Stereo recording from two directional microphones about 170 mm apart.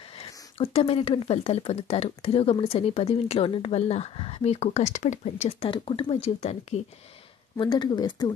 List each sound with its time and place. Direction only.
0.1 s speech: 35° left (ahead or behind)
7.5 s speech: 25° left (ahead or behind)